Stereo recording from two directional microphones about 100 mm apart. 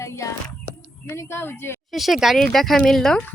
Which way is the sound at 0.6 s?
25° left (ahead or behind).